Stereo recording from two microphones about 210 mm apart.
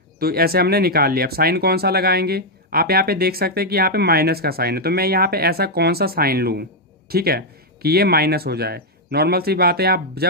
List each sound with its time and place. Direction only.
0.2 s speech: 45° right (ahead or behind)